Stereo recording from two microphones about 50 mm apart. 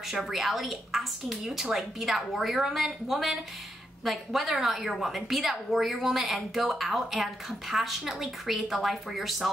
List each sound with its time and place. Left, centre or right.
0.1 s a woman's voice: centre